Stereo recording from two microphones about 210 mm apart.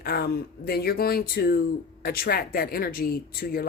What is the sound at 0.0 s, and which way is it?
Speech, 45° left (ahead or behind).